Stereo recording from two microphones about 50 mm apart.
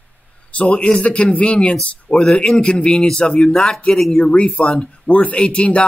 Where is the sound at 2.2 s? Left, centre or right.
Centre.